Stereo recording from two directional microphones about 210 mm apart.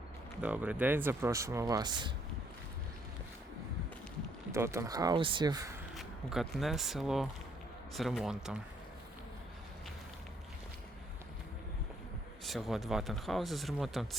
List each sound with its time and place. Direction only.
0.4 s speech: 5° right (ahead or behind)
4.5 s speech: 15° right (ahead or behind)
6.0 s speech: centre (ahead or behind)
12.5 s speech: centre (ahead or behind)